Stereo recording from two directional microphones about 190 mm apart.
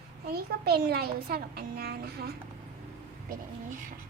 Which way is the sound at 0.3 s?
55° right (ahead or behind).